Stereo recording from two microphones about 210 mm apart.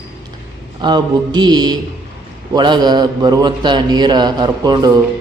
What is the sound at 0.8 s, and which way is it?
A man's voice, 20° right (ahead or behind).